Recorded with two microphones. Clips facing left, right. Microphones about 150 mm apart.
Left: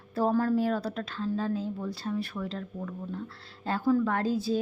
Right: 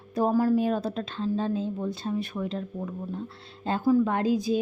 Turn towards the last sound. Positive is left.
turn(degrees=-15)  # may be behind; listen again after turning